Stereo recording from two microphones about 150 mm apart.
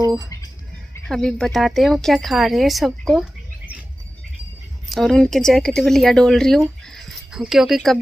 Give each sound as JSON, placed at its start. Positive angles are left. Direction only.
{"t": 0.0, "sound": "a sound", "side_deg": -25}
{"t": 1.0, "sound": "speech", "side_deg": 5}
{"t": 4.8, "sound": "speech", "side_deg": 0}